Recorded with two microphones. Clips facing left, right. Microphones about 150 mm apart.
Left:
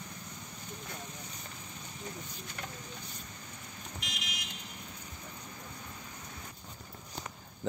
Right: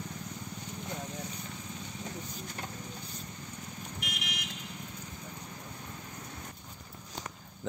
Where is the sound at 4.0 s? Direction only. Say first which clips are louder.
Right 2 dB; 65° right (ahead or behind).